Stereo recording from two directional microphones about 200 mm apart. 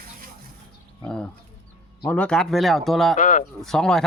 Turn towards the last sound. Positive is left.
turn(degrees=0)  # may be behind; listen again after turning